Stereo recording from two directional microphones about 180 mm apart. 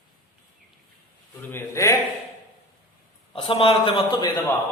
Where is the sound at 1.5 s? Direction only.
15° left (ahead or behind).